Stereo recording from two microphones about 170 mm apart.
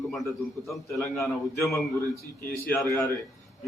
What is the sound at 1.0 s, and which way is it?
A man's voice, 15° left (ahead or behind).